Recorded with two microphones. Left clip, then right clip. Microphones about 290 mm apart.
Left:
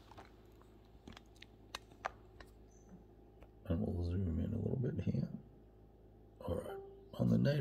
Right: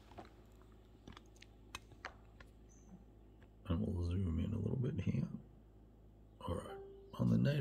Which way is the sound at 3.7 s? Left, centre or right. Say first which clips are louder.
Left 2 dB; centre.